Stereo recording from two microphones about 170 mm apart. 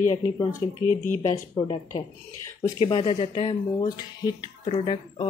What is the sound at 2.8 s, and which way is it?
Speech, 35° left (ahead or behind).